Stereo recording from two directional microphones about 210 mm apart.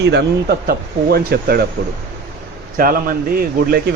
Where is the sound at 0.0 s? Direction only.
55° right (ahead or behind).